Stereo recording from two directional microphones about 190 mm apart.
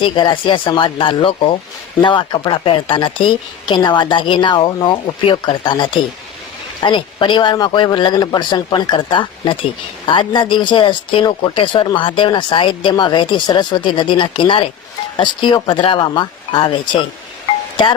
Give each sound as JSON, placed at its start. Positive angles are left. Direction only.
{"t": 0.0, "sound": "speech", "side_deg": 25}